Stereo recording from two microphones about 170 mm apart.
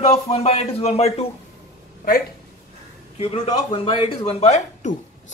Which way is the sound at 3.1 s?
35° left (ahead or behind).